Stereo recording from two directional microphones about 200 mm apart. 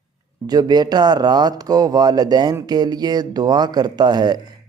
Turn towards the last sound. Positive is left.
turn(degrees=-20)  # may be behind; listen again after turning